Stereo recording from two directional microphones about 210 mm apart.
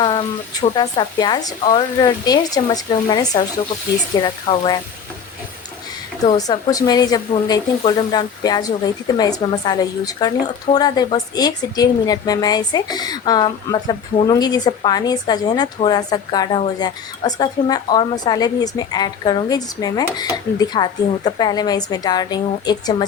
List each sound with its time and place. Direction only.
0.0 s a sound: 20° left (ahead or behind)
0.8 s a woman's voice: 20° left (ahead or behind)
6.1 s a woman's voice: 20° left (ahead or behind)